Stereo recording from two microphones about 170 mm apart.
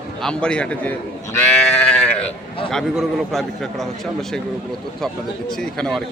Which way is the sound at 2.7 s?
Centre (ahead or behind).